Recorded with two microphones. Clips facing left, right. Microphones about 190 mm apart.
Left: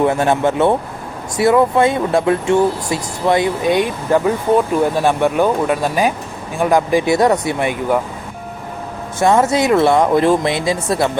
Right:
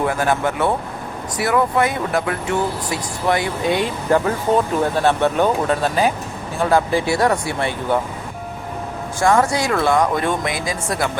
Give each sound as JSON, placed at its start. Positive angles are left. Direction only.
{"t": 0.0, "sound": "speech", "side_deg": 25}
{"t": 9.1, "sound": "speech", "side_deg": 20}